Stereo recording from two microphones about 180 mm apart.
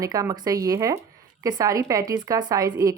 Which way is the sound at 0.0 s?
20° right (ahead or behind).